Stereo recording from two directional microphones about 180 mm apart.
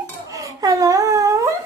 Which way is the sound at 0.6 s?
20° right (ahead or behind).